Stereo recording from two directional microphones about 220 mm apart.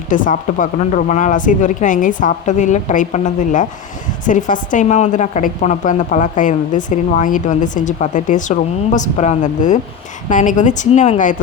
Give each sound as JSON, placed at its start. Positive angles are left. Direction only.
{"t": 0.1, "sound": "a woman's voice", "side_deg": 35}